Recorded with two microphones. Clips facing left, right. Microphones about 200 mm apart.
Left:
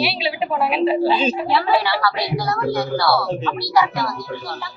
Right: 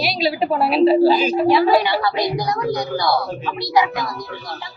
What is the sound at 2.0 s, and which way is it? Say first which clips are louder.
A woman's voice: right 1 dB; 20° right (ahead or behind).